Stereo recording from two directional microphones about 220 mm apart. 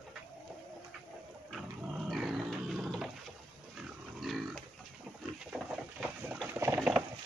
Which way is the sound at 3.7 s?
Centre (ahead or behind).